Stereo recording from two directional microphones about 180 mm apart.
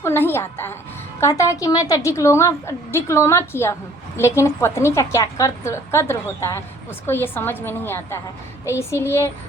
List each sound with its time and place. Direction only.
0.0 s a woman's voice: 10° left (ahead or behind)